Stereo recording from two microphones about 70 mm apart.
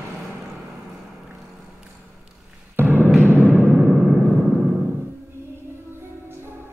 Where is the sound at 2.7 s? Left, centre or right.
Right.